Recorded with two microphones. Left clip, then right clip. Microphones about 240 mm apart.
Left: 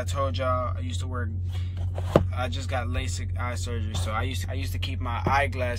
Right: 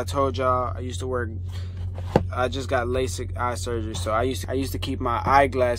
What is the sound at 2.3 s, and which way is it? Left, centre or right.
Speech, centre.